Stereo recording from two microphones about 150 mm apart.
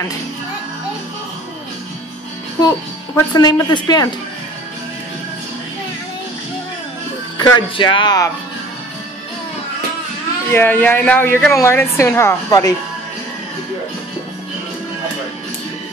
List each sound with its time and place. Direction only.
3.2 s speech: 25° left (ahead or behind)
7.3 s speech: 30° left (ahead or behind)
10.5 s a woman's voice: 15° left (ahead or behind)